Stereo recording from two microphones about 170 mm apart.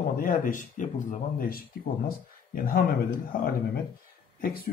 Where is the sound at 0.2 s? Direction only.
50° left (ahead or behind).